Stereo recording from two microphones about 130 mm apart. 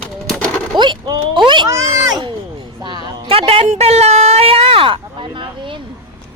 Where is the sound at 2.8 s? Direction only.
35° right (ahead or behind).